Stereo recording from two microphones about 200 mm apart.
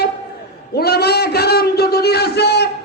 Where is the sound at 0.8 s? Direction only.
55° left (ahead or behind).